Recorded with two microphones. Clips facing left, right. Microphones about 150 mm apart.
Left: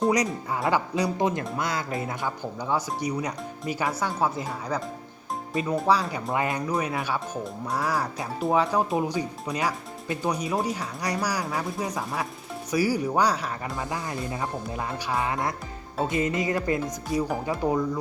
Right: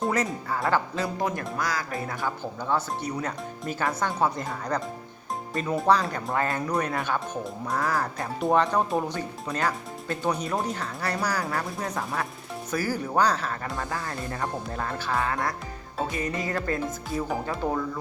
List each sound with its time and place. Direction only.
0.5 s speech: 15° left (ahead or behind)